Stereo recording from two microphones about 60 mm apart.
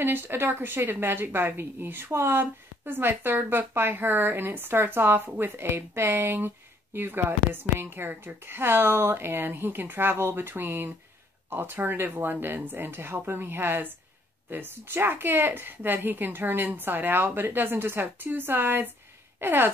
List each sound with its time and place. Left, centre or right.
0.0 s speech: right